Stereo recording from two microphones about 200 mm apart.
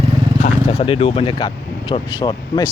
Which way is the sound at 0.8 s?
30° left (ahead or behind).